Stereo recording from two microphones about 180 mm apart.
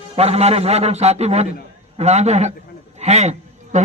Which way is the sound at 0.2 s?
35° right (ahead or behind).